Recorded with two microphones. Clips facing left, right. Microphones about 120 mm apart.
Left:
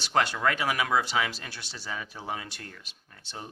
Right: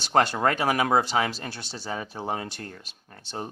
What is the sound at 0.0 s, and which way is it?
Speech, 35° right (ahead or behind).